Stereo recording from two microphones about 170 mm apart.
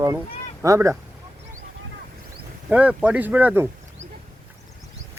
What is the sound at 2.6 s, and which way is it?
Speech, 5° right (ahead or behind).